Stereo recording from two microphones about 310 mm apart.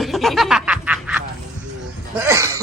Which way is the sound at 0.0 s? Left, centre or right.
Centre.